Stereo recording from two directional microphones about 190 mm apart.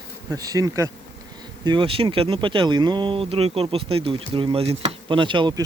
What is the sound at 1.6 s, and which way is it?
Speech, 25° right (ahead or behind).